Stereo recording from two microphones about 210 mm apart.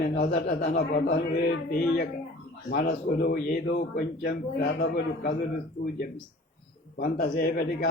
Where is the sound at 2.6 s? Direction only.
50° left (ahead or behind).